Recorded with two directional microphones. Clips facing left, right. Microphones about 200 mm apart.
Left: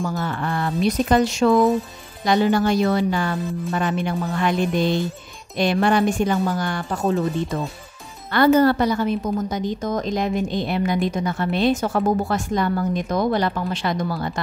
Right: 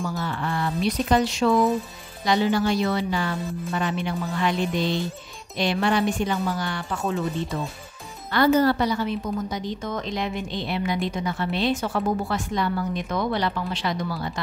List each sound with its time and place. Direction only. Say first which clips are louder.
0.0 s a woman's voice: left 3 dB; 50° left (ahead or behind)
8.3 s a woman's voice: left 4 dB; 55° left (ahead or behind)